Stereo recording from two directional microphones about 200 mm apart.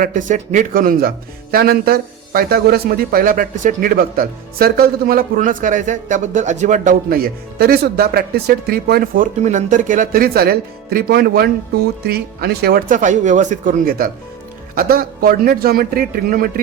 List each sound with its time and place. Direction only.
0.0 s a man's voice: 40° right (ahead or behind)